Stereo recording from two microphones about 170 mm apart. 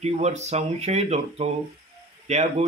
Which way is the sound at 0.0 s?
40° right (ahead or behind).